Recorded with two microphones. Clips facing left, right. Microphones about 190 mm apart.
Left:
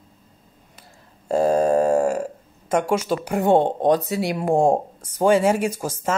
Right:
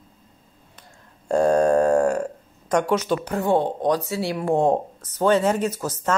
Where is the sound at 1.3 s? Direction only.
5° left (ahead or behind).